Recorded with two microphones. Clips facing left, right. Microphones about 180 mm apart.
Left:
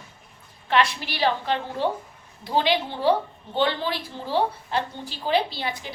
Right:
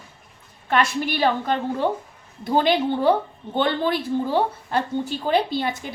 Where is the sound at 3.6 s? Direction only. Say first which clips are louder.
Right 3 dB; 50° right (ahead or behind).